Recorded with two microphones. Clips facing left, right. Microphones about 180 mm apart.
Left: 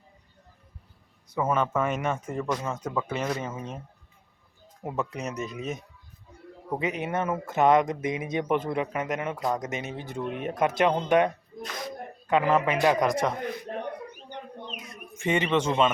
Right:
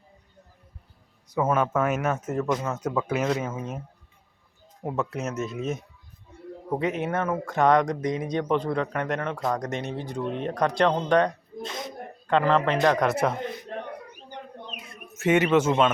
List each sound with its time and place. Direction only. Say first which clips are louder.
1.3 s speech: right 2 dB; 5° right (ahead or behind)
4.8 s speech: right 2 dB; centre (ahead or behind)
11.6 s a sound: right 2 dB; 25° right (ahead or behind)
12.3 s speech: right 1 dB; 10° left (ahead or behind)
13.1 s speech: right 2 dB; 5° right (ahead or behind)
15.1 s a man's voice: right 5 dB; 5° right (ahead or behind)